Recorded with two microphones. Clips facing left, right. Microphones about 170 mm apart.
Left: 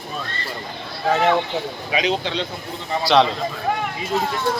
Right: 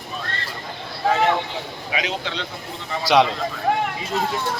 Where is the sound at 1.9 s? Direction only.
25° left (ahead or behind).